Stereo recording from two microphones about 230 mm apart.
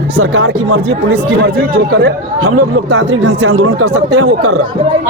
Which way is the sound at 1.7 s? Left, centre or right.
Right.